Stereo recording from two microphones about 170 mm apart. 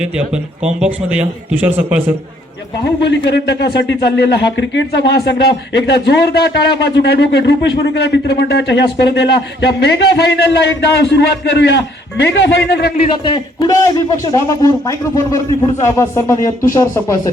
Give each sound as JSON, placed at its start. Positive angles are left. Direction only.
{"t": 0.8, "sound": "a man's voice", "side_deg": -5}
{"t": 3.1, "sound": "speech", "side_deg": 90}
{"t": 13.2, "sound": "a man's voice", "side_deg": 25}